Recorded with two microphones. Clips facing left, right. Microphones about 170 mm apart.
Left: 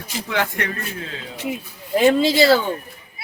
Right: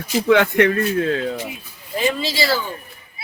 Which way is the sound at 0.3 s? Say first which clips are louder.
Right 10 dB; 60° right (ahead or behind).